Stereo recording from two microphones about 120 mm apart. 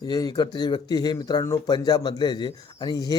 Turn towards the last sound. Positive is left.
turn(degrees=35)  # may be behind; listen again after turning